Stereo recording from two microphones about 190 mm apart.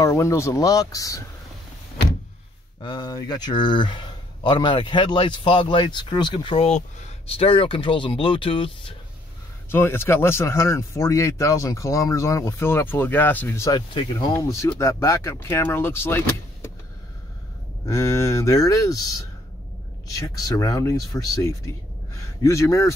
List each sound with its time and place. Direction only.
0.0 s a man's voice: 15° left (ahead or behind)
2.8 s speech: 25° left (ahead or behind)
9.7 s a man's voice: 10° left (ahead or behind)
17.8 s a man's voice: 15° left (ahead or behind)